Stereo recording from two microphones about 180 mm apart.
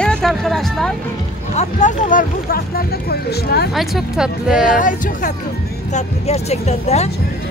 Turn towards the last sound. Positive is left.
turn(degrees=35)  # may be behind; listen again after turning